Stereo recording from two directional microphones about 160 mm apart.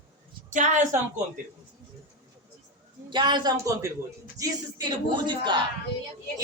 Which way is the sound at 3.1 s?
30° right (ahead or behind).